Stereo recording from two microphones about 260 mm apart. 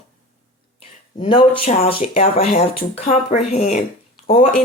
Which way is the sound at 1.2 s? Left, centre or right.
Centre.